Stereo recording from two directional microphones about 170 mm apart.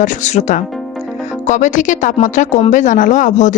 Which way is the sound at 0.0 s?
45° left (ahead or behind).